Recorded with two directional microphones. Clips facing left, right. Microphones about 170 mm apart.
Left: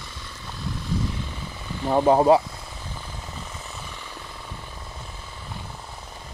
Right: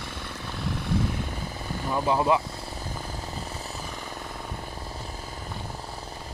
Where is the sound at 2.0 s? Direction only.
40° left (ahead or behind).